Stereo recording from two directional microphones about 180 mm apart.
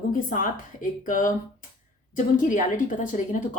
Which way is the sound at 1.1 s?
50° left (ahead or behind).